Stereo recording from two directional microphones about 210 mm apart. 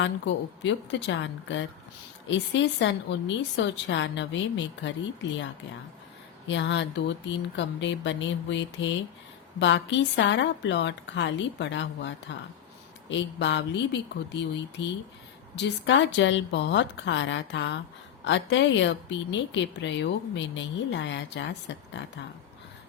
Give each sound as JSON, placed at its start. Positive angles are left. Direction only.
{"t": 0.0, "sound": "speech", "side_deg": 60}
{"t": 6.5, "sound": "speech", "side_deg": 60}